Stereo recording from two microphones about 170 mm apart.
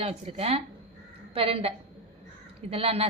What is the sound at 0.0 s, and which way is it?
A woman's voice, 40° right (ahead or behind).